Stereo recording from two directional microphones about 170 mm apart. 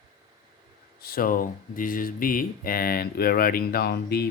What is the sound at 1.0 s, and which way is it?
Speech, 60° left (ahead or behind).